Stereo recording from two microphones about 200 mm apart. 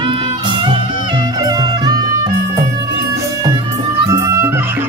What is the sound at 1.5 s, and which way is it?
Music, 20° right (ahead or behind).